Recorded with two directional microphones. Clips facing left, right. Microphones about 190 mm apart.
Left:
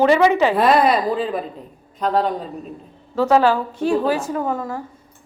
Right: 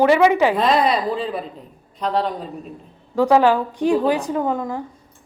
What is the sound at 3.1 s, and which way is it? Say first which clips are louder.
A woman's voice: right 1 dB; 15° right (ahead or behind).